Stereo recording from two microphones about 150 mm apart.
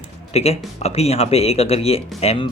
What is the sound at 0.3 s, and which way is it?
Speech, 45° left (ahead or behind).